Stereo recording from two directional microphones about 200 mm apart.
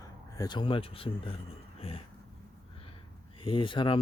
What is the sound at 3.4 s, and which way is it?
Speech, 25° left (ahead or behind).